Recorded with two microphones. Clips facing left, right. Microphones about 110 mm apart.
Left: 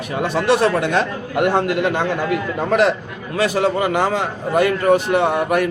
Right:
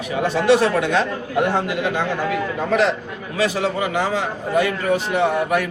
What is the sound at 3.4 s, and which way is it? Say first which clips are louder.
A man's voice: left 3 dB; 50° left (ahead or behind).